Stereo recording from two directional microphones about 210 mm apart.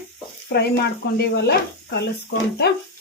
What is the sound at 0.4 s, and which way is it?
Speech, 50° left (ahead or behind).